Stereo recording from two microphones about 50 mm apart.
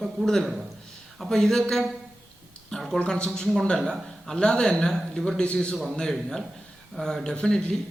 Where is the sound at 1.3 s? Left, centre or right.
Centre.